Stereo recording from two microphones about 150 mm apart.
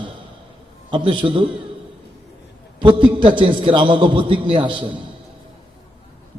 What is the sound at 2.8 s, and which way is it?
A man's voice, 35° right (ahead or behind).